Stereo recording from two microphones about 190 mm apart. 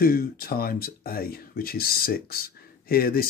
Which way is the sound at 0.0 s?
50° left (ahead or behind).